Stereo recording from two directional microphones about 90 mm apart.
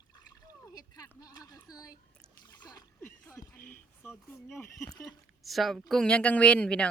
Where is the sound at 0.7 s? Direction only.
40° left (ahead or behind).